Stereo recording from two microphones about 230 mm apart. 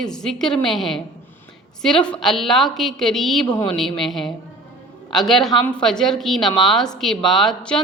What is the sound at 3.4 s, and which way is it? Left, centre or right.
Speech, centre.